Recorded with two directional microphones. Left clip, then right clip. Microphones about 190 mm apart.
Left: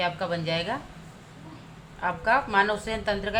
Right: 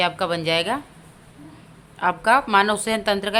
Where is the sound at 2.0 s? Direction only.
45° right (ahead or behind).